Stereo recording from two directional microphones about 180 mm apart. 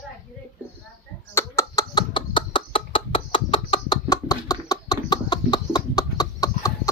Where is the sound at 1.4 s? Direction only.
15° left (ahead or behind).